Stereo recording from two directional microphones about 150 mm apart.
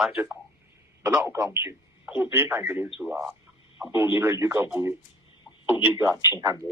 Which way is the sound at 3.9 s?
15° right (ahead or behind).